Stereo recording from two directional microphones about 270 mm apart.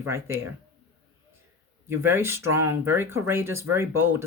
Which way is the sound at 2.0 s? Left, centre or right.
Centre.